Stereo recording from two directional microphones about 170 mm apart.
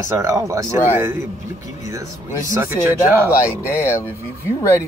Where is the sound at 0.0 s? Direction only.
15° right (ahead or behind).